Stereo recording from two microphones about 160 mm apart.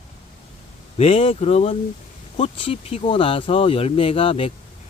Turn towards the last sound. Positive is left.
turn(degrees=35)  # may be behind; listen again after turning